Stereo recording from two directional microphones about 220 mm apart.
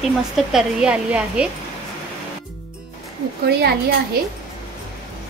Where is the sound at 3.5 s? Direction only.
45° right (ahead or behind).